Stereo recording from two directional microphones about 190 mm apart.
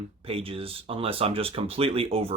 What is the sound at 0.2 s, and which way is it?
Speech, 30° right (ahead or behind).